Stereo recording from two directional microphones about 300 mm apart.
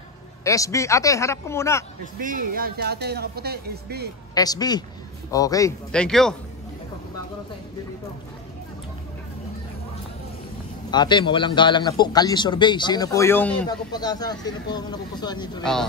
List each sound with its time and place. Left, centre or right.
0.4 s a man's voice: centre
2.1 s speech: right
4.4 s a man's voice: centre
10.9 s a man's voice: centre